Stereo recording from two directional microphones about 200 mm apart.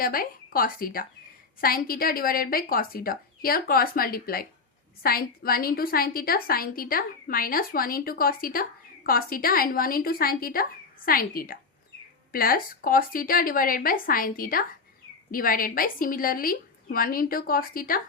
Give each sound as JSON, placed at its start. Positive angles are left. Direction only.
{"t": 0.0, "sound": "a woman's voice", "side_deg": 45}